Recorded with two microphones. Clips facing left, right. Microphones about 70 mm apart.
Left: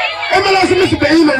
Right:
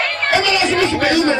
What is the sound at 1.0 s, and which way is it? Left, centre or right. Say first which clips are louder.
Speech: left 7 dB; left.